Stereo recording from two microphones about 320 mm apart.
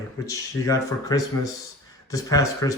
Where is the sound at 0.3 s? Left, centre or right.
Centre.